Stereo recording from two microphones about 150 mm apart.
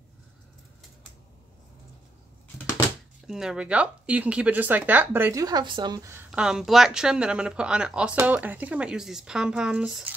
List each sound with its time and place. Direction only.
3.3 s speech: 5° right (ahead or behind)
5.4 s speech: 30° right (ahead or behind)
6.3 s speech: 5° right (ahead or behind)